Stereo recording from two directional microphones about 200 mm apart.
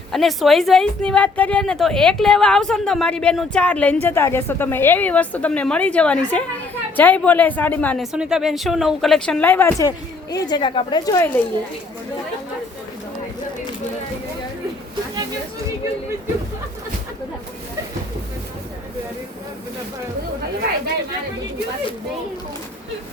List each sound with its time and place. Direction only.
0.1 s a woman's voice: centre (ahead or behind)
8.1 s speech: 5° right (ahead or behind); by 11.3 s 20° left (ahead or behind)